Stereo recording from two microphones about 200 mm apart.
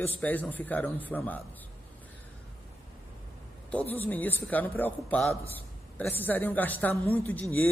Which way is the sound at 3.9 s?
10° left (ahead or behind).